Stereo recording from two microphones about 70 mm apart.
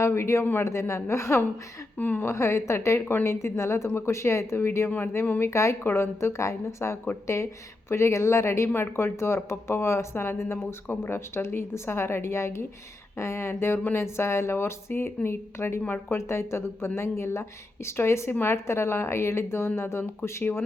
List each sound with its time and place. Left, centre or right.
0.0 s a woman's voice: left
2.0 s speech: left
2.2 s a woman's voice: left
3.0 s speech: left
3.2 s speech: left
5.2 s speech: left
5.5 s a woman's voice: left
5.8 s speech: left